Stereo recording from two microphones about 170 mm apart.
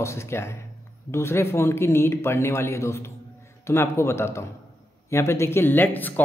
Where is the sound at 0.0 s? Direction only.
15° left (ahead or behind).